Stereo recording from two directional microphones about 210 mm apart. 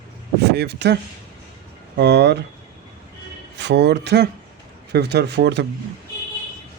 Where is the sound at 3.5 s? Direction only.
55° right (ahead or behind).